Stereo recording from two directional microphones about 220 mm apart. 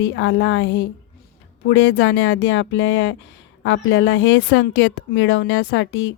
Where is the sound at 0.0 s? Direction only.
60° left (ahead or behind).